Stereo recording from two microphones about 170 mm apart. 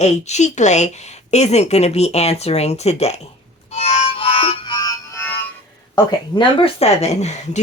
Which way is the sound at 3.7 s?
35° left (ahead or behind).